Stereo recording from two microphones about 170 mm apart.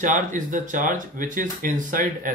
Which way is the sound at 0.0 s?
50° right (ahead or behind).